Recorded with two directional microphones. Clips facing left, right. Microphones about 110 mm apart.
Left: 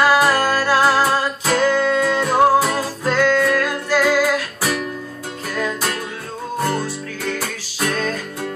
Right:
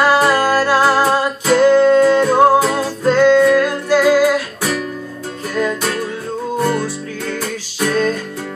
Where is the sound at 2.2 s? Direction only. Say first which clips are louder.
Right 3 dB; 5° left (ahead or behind).